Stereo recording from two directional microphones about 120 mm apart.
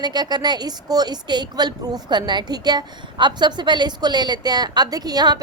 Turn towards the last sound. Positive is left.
turn(degrees=-35)  # may be behind; listen again after turning